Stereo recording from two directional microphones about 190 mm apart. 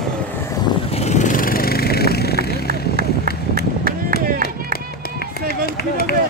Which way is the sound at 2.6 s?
50° right (ahead or behind).